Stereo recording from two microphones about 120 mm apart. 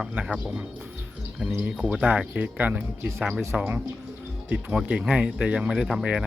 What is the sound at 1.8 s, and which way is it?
Speech, 5° right (ahead or behind).